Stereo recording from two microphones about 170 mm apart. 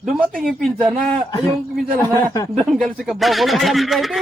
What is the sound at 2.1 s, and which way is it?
Speech, 20° left (ahead or behind).